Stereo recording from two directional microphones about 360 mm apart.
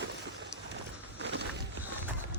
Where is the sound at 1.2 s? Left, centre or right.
Right.